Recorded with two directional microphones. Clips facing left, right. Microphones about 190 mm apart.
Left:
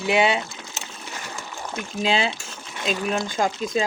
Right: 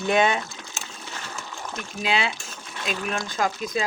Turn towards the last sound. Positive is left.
turn(degrees=25)  # may be behind; listen again after turning